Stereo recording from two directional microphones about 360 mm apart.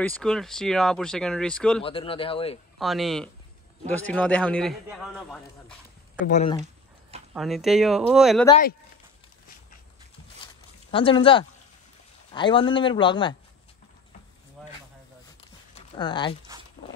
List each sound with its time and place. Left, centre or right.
0.0 s a man's voice: centre
1.8 s speech: centre
2.8 s a man's voice: centre
6.2 s speech: centre
6.6 s a sound: centre
7.3 s a man's voice: centre
8.5 s speech: centre
10.9 s speech: centre
14.6 s a sound: centre
15.7 s a sound: centre